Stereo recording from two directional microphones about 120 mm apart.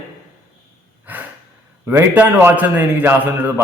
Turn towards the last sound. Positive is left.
turn(degrees=-15)  # may be behind; listen again after turning